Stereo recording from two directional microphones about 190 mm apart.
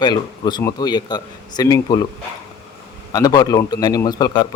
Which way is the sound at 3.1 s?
20° left (ahead or behind).